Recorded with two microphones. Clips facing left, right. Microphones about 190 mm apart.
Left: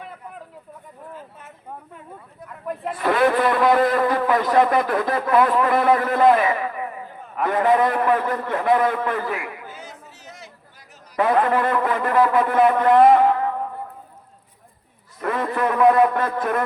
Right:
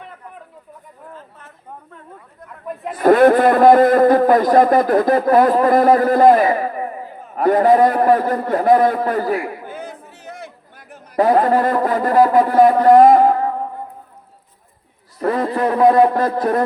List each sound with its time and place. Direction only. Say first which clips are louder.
1.1 s a sound: even; 10° left (ahead or behind)
2.5 s a sound: even; centre (ahead or behind)
2.9 s a man's voice: right 8 dB; 45° right (ahead or behind)
9.6 s chatter: right 7 dB; 55° right (ahead or behind)
11.2 s a man's voice: right 5 dB; 35° right (ahead or behind)
15.2 s a man's voice: right 5 dB; 35° right (ahead or behind)